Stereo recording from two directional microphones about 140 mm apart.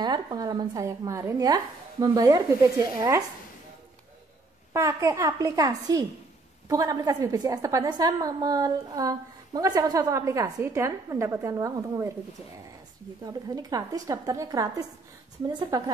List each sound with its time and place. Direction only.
0.0 s a woman's voice: 30° right (ahead or behind)
4.7 s a woman's voice: 20° right (ahead or behind)
13.2 s a woman's voice: 25° right (ahead or behind)